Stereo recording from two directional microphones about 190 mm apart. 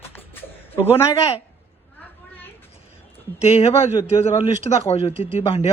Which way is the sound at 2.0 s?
10° left (ahead or behind).